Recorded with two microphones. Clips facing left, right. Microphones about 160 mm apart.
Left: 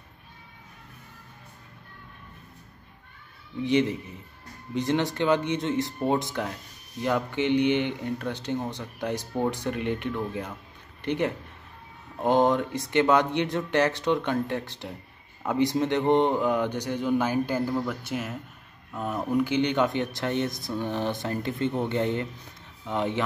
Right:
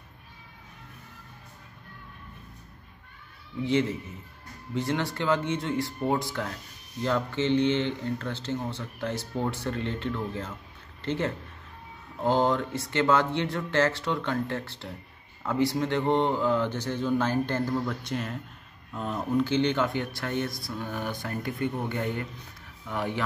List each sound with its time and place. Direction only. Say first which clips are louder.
3.6 s speech: left 2 dB; 20° left (ahead or behind)